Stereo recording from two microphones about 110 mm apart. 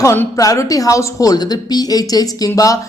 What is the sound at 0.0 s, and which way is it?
Speech, 25° left (ahead or behind).